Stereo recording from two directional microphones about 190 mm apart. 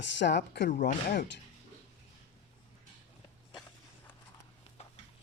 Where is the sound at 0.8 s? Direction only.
50° left (ahead or behind).